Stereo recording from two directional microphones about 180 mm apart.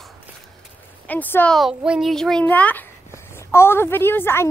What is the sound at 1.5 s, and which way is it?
A child's voice, 5° right (ahead or behind).